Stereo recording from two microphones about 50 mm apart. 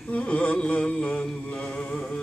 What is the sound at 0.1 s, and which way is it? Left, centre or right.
Speech, left.